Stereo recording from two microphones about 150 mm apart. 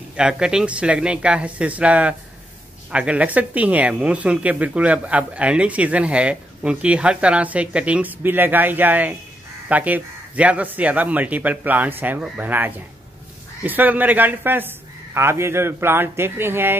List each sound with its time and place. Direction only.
0.1 s speech: 5° right (ahead or behind)